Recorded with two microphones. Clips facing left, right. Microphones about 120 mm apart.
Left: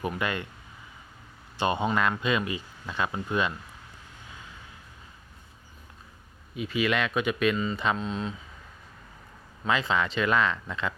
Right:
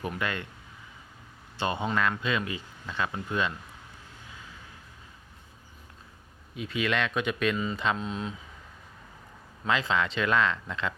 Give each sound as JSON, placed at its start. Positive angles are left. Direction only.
{"t": 0.2, "sound": "speech", "side_deg": 15}
{"t": 1.5, "sound": "speech", "side_deg": 15}
{"t": 6.6, "sound": "speech", "side_deg": 5}
{"t": 9.6, "sound": "speech", "side_deg": 5}